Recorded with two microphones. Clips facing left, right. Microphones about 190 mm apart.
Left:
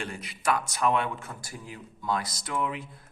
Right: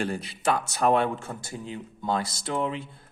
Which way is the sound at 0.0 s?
30° right (ahead or behind).